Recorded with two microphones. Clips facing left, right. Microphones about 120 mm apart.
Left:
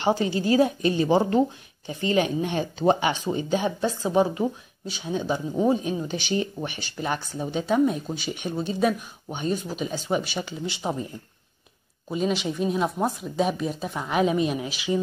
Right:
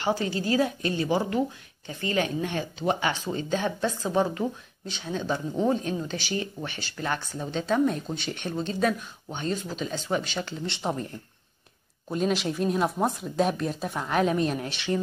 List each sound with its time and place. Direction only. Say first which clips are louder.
0.0 s a woman's voice: left 4 dB; 20° left (ahead or behind)